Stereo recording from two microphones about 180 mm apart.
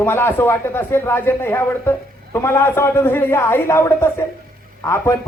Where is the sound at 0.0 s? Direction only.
10° left (ahead or behind).